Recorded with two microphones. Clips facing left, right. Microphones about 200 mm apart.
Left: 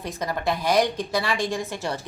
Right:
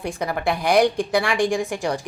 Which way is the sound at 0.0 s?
10° right (ahead or behind).